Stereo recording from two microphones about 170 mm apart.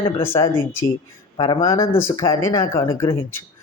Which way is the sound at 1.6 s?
15° left (ahead or behind).